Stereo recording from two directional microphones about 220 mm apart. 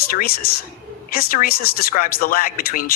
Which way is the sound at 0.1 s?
40° left (ahead or behind).